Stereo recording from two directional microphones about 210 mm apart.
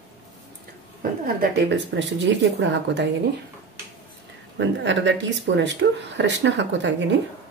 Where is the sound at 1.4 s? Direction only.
55° right (ahead or behind).